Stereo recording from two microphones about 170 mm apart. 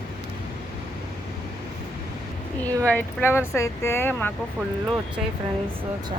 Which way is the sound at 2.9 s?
10° left (ahead or behind).